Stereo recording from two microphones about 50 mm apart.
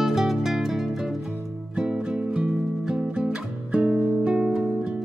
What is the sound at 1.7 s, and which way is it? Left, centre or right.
Music, centre.